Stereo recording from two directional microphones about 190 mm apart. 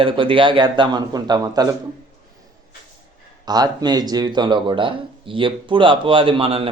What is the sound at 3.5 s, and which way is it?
Speech, 20° right (ahead or behind).